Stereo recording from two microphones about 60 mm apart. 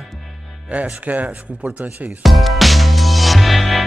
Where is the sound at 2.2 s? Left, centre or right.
Centre.